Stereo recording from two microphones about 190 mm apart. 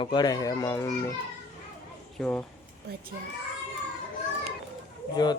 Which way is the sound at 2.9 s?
55° right (ahead or behind).